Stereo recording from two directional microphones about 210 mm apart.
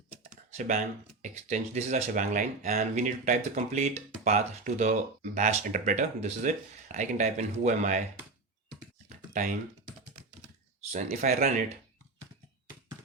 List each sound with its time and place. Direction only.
0.1 s computer keyboard: 35° right (ahead or behind)
1.2 s speech: 35° right (ahead or behind)
9.0 s a sound: 35° right (ahead or behind)
10.9 s speech: 35° right (ahead or behind)